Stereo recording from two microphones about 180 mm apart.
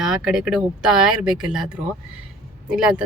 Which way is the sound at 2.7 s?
5° right (ahead or behind).